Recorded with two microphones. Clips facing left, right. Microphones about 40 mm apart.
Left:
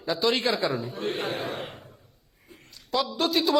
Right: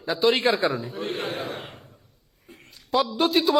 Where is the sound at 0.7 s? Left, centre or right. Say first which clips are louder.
Right 1 dB; centre.